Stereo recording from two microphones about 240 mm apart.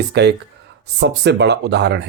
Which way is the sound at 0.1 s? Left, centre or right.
Right.